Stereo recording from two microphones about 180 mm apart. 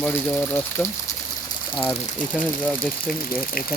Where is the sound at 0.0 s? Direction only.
10° left (ahead or behind).